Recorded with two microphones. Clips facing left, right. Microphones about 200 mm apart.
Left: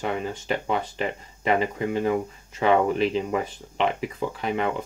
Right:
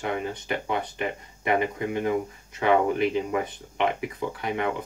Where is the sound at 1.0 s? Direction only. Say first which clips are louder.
Left 2 dB; 30° left (ahead or behind).